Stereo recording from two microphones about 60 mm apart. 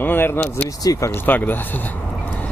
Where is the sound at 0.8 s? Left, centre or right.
Left.